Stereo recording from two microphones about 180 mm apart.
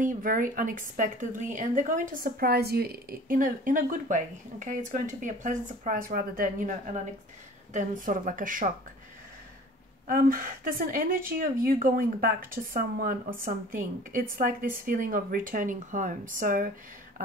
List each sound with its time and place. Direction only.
0.0 s speech: 50° right (ahead or behind)
10.0 s speech: 50° right (ahead or behind)